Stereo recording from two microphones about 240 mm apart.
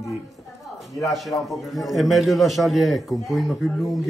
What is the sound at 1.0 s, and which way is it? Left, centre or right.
A man's voice, centre.